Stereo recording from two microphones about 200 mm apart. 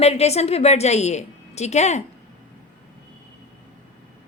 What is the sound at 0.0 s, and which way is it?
A woman's voice, 30° left (ahead or behind).